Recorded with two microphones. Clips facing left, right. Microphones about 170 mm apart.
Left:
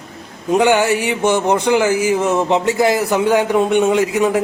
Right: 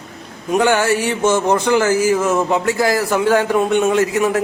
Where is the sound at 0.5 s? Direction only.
20° left (ahead or behind).